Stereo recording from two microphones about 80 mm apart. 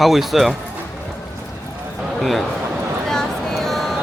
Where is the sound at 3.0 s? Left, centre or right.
Centre.